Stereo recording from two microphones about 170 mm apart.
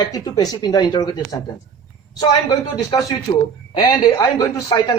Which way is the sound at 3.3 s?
35° left (ahead or behind).